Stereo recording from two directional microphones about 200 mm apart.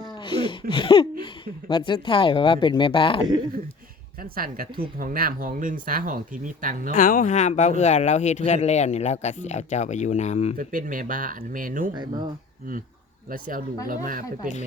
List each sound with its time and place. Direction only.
0.1 s a sound: 25° left (ahead or behind)
0.7 s speech: 25° left (ahead or behind)
4.2 s speech: 45° right (ahead or behind)
6.9 s speech: 40° left (ahead or behind)
10.6 s speech: 45° right (ahead or behind)
11.9 s speech: 20° right (ahead or behind)
13.8 s speech: 45° right (ahead or behind)